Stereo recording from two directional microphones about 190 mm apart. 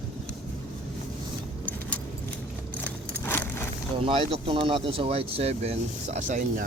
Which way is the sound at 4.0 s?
30° right (ahead or behind).